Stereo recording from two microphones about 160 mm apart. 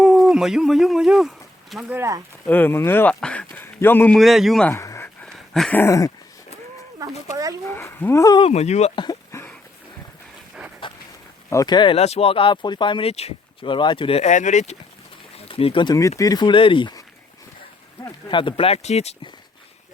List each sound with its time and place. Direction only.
0.0 s speech: centre (ahead or behind)
1.9 s speech: 15° right (ahead or behind)
2.5 s speech: 10° left (ahead or behind)
4.2 s a man's voice: centre (ahead or behind)
4.7 s a sound: 20° left (ahead or behind)
5.8 s speech: 20° left (ahead or behind)
7.0 s a sound: 20° right (ahead or behind)
7.7 s speech: 15° left (ahead or behind)
8.4 s speech: 40° left (ahead or behind)
9.0 s a sound: 25° left (ahead or behind)
10.8 s dog: 30° left (ahead or behind)
11.4 s speech: 20° left (ahead or behind); by 14.8 s 45° left (ahead or behind)
15.4 s speech: 35° left (ahead or behind)
18.3 s speech: 30° left (ahead or behind)